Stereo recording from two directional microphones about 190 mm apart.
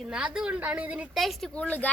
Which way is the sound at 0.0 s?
5° right (ahead or behind).